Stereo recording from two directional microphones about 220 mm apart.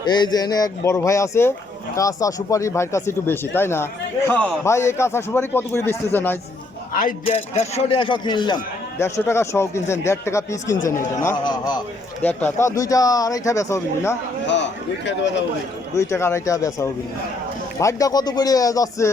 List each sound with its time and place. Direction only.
0.0 s a man's voice: 20° left (ahead or behind)
7.3 s a man's voice: 25° left (ahead or behind); by 14.2 s 10° left (ahead or behind)
14.4 s a man's voice: 55° left (ahead or behind)
16.0 s a man's voice: 10° left (ahead or behind)